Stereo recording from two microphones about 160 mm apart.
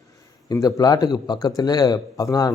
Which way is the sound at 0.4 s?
20° left (ahead or behind).